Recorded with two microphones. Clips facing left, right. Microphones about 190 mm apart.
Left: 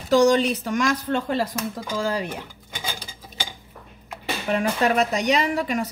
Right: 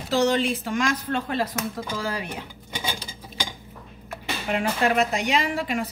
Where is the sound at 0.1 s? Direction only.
40° left (ahead or behind).